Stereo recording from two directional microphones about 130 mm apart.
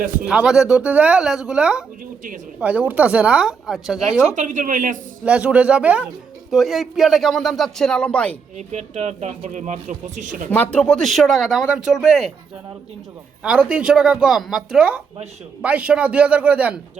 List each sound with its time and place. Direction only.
0.3 s speech: 5° right (ahead or behind)
4.4 s a woman's voice: 80° right
5.2 s speech: 10° right (ahead or behind); by 8.4 s 10° left (ahead or behind)
8.5 s speech: 55° right (ahead or behind); by 10.4 s 75° right (ahead or behind)
10.5 s speech: 10° left (ahead or behind)
13.4 s speech: 10° right (ahead or behind)